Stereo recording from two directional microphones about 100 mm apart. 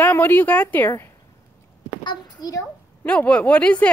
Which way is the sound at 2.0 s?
45° left (ahead or behind).